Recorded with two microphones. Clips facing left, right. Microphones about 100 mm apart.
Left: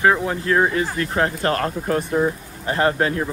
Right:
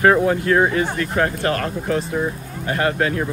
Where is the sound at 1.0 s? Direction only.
30° left (ahead or behind).